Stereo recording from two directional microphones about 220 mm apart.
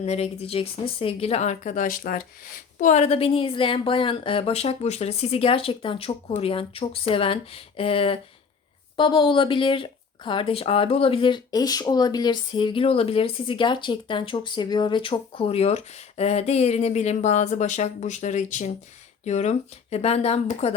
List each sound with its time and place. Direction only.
0.0 s speech: 30° left (ahead or behind)